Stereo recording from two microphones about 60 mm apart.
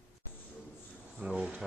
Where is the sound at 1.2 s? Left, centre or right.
Centre.